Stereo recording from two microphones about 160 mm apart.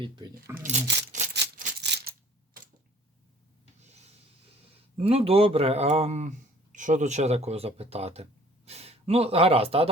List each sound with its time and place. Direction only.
0.0 s speech: 25° right (ahead or behind)
0.6 s speech: 50° right (ahead or behind)
1.3 s a sound: 90° right
3.8 s printer: 45° right (ahead or behind)
4.9 s speech: 35° right (ahead or behind)